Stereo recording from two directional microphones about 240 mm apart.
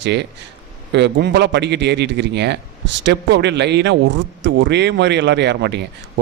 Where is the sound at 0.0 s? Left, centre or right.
Right.